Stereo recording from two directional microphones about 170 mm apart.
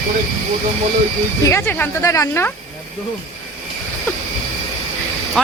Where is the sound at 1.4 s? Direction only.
15° left (ahead or behind).